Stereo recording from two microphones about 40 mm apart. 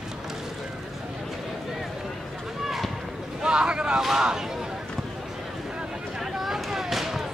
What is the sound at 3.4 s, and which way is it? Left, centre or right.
Speech, right.